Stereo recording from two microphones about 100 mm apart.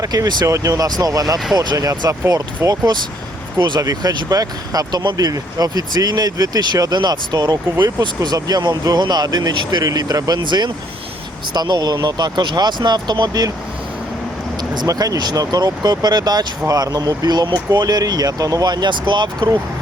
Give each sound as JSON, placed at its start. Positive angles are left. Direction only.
{"t": 0.0, "sound": "speech", "side_deg": -40}
{"t": 0.4, "sound": "speech", "side_deg": -30}
{"t": 14.8, "sound": "speech", "side_deg": -40}